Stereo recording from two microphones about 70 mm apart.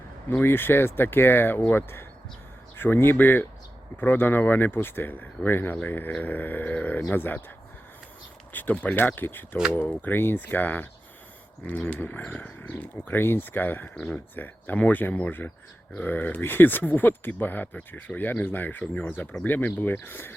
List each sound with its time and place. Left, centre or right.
0.4 s speech: left
8.5 s speech: left
11.9 s speech: left